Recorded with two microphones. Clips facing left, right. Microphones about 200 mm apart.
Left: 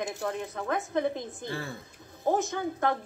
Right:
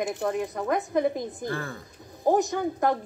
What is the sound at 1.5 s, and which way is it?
Speech, 15° left (ahead or behind).